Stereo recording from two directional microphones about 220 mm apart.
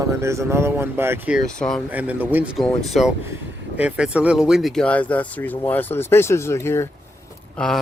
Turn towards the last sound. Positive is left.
turn(degrees=5)  # may be behind; listen again after turning